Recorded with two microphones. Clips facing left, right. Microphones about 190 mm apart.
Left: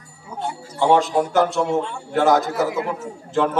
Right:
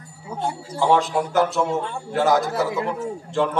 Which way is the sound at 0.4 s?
Centre (ahead or behind).